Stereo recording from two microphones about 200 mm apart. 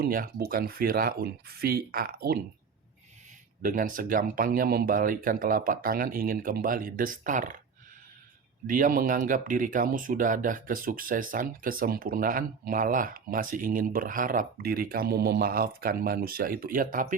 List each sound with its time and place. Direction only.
0.0 s speech: 45° right (ahead or behind)
3.6 s speech: 40° right (ahead or behind)
8.6 s speech: 40° right (ahead or behind)